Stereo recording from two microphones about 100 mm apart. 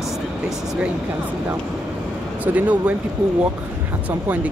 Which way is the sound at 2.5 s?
15° right (ahead or behind).